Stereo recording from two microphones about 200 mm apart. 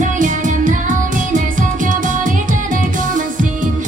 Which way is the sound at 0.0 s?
40° right (ahead or behind).